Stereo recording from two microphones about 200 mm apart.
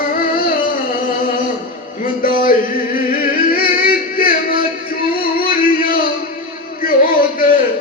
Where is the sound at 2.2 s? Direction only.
45° left (ahead or behind).